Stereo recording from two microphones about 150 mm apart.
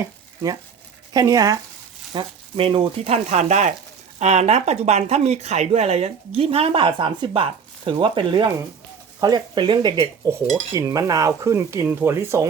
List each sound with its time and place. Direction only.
1.1 s cutlery: 25° right (ahead or behind)
2.1 s speech: 35° right (ahead or behind)
9.2 s cutlery: 30° right (ahead or behind)